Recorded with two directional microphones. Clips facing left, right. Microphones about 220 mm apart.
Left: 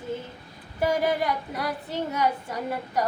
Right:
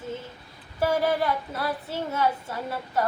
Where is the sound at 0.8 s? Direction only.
15° left (ahead or behind).